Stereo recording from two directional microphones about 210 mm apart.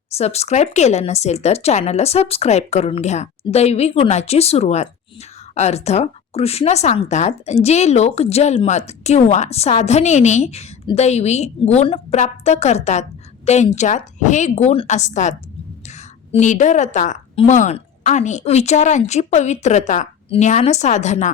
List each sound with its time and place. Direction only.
0.2 s speech: 30° left (ahead or behind)